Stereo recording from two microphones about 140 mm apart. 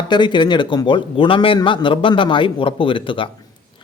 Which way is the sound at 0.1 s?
35° left (ahead or behind).